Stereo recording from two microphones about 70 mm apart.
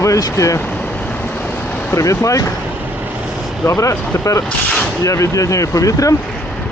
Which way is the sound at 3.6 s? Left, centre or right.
Left.